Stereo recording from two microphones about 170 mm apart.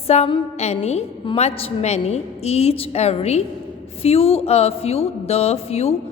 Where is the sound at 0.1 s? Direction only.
40° left (ahead or behind).